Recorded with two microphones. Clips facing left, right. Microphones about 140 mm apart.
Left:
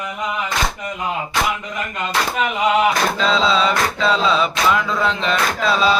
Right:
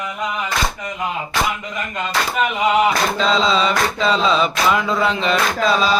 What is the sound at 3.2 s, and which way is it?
Mantra, 5° left (ahead or behind).